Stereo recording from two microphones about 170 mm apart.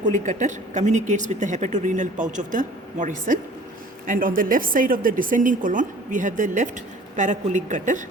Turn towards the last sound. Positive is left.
turn(degrees=-45)  # may be behind; listen again after turning